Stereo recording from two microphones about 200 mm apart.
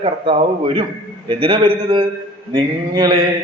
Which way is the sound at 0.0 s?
25° right (ahead or behind).